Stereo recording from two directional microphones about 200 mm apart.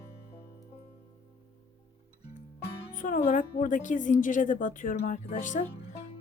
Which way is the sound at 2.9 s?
40° left (ahead or behind).